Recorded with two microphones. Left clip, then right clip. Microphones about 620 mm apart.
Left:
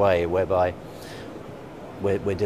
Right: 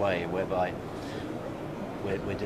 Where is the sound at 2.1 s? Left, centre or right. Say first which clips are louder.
Left 9 dB; left.